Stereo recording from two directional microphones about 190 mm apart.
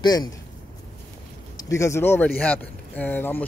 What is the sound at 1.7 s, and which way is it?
Speech, 15° left (ahead or behind).